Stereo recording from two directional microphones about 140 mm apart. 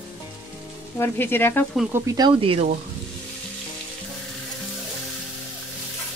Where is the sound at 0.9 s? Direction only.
15° left (ahead or behind).